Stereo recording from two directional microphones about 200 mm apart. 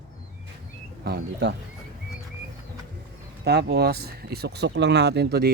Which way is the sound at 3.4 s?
55° right (ahead or behind).